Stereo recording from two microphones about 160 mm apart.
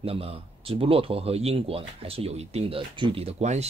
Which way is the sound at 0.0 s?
35° right (ahead or behind).